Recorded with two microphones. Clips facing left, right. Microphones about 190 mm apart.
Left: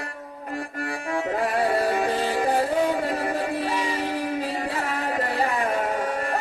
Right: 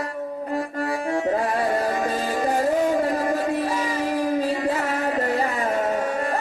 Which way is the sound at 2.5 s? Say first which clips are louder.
Right 2 dB; 30° left (ahead or behind).